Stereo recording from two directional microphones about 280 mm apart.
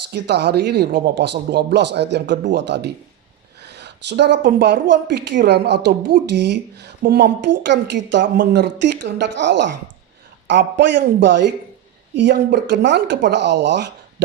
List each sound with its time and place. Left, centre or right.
0.1 s a woman's voice: right